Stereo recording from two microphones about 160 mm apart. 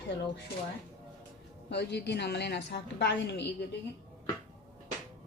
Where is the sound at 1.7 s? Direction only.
90° left.